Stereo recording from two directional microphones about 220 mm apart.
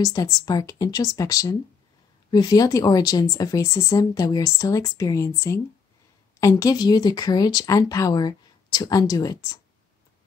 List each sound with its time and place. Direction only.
0.0 s speech: 15° left (ahead or behind)